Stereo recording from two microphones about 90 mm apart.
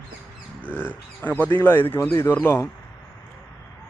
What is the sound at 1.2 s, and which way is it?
Speech, 20° left (ahead or behind).